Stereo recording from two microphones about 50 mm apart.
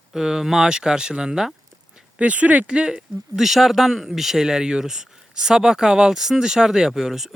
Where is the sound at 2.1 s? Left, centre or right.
Right.